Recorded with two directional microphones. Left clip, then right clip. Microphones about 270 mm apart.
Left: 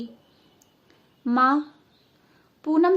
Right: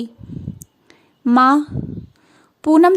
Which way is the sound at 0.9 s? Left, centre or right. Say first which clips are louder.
Right 9 dB; right.